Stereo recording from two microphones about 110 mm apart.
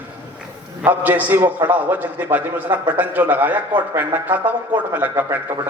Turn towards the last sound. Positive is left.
turn(degrees=-15)  # may be behind; listen again after turning